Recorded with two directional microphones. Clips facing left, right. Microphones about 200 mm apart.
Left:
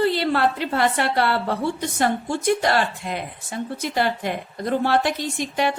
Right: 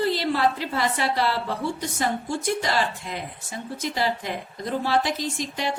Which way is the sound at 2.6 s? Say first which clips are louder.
Left 4 dB; 60° left (ahead or behind).